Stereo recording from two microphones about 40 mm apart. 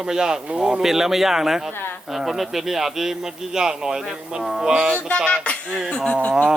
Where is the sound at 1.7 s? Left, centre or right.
Left.